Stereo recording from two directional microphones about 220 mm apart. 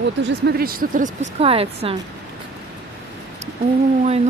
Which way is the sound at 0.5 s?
45° right (ahead or behind).